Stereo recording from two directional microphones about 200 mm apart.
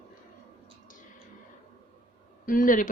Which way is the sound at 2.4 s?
45° left (ahead or behind).